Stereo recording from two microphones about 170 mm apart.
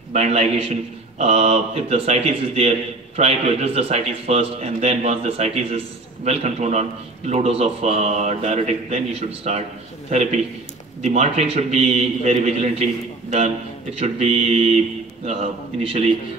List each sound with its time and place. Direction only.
0.1 s a man's voice: 40° right (ahead or behind)
13.9 s a man's voice: 40° right (ahead or behind)